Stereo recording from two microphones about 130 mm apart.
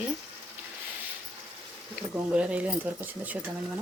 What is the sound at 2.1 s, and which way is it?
Speech, 10° right (ahead or behind).